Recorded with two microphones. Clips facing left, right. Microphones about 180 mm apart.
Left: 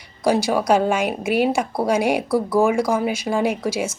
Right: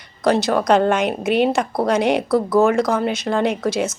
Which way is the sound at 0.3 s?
10° left (ahead or behind).